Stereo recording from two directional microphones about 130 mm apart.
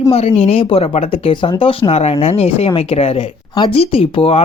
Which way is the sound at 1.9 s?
55° left (ahead or behind).